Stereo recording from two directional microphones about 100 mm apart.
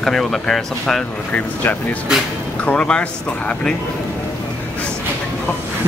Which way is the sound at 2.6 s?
10° left (ahead or behind).